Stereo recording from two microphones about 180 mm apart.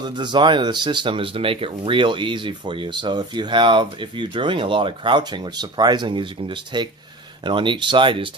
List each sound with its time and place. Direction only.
0.2 s speech: 25° right (ahead or behind)